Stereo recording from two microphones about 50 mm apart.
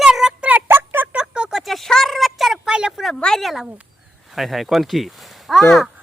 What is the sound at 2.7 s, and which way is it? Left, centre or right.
Speech, centre.